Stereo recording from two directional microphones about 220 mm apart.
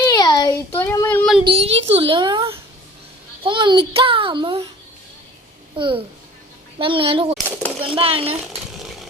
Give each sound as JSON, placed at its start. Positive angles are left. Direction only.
{"t": 0.1, "sound": "child singing", "side_deg": 15}
{"t": 1.5, "sound": "a child's voice", "side_deg": -25}
{"t": 5.7, "sound": "a child's voice", "side_deg": -25}